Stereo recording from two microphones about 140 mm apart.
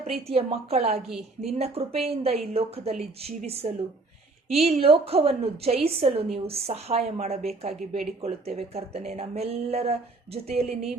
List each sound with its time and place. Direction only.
0.0 s speech: 45° right (ahead or behind)
1.0 s a woman's voice: centre (ahead or behind)
1.5 s speech: 45° right (ahead or behind)